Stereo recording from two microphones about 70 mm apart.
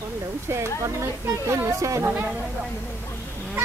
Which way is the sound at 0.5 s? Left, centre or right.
Right.